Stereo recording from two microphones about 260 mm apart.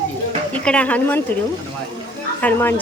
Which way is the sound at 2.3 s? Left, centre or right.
Centre.